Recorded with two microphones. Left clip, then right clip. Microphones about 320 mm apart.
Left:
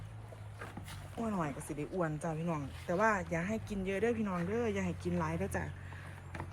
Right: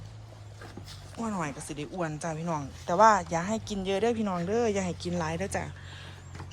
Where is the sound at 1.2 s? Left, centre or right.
Centre.